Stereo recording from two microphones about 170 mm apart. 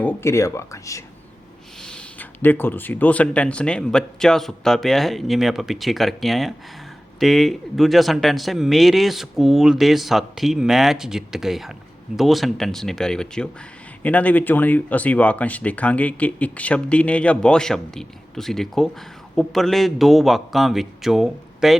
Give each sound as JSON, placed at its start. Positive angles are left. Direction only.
{"t": 0.0, "sound": "speech", "side_deg": 15}
{"t": 1.8, "sound": "speech", "side_deg": 5}